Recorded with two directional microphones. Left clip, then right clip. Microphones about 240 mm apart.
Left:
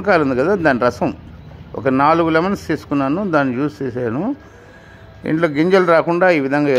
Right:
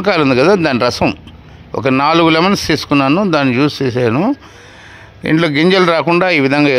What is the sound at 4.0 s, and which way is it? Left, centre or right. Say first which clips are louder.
Speech: right 8 dB; right.